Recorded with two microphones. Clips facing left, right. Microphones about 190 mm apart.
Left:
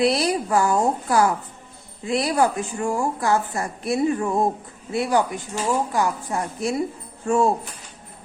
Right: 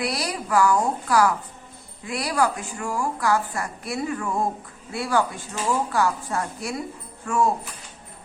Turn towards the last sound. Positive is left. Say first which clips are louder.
# left 3 dB
turn(degrees=25)  # may be behind; listen again after turning